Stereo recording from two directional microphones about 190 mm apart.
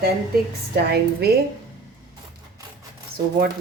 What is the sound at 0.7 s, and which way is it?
Speech, 55° right (ahead or behind).